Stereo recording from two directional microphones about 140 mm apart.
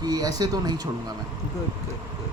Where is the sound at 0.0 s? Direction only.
30° right (ahead or behind).